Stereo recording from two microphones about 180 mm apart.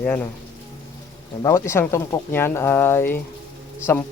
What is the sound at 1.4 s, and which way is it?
Speech, 15° left (ahead or behind).